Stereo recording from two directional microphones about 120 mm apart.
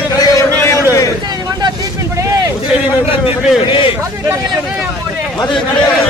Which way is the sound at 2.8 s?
55° left (ahead or behind).